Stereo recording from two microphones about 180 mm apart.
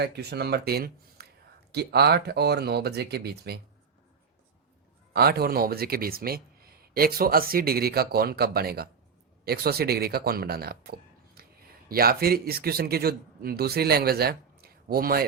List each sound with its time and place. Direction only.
0.0 s speech: 65° right (ahead or behind)
5.1 s speech: 60° right (ahead or behind)